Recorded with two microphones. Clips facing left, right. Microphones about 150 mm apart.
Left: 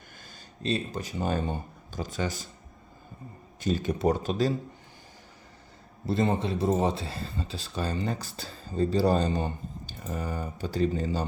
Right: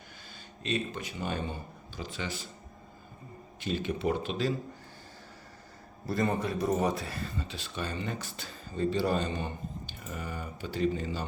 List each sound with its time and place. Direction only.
0.6 s speech: 35° left (ahead or behind)
3.6 s speech: 40° left (ahead or behind)
6.1 s speech: 25° left (ahead or behind)